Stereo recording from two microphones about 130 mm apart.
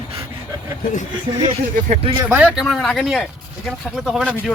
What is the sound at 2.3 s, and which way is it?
Speech, 10° right (ahead or behind).